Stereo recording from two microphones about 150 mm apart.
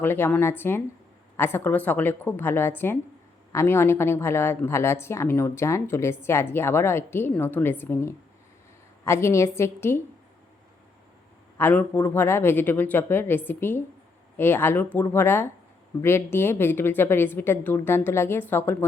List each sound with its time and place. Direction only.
0.0 s a woman's voice: 15° left (ahead or behind)
11.5 s a woman's voice: 10° left (ahead or behind)